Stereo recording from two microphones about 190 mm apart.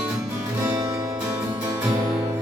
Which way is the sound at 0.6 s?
15° right (ahead or behind).